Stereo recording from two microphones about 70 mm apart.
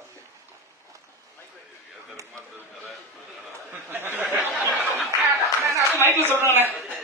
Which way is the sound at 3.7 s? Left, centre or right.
Right.